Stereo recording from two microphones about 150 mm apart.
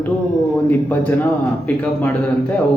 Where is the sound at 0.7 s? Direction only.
10° left (ahead or behind).